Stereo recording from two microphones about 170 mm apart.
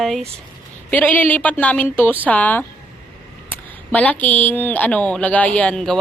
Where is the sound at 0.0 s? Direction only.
Centre (ahead or behind).